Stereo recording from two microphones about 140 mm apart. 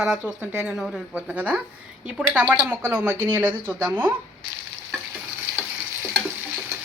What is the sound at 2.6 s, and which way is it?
Speech, 15° right (ahead or behind).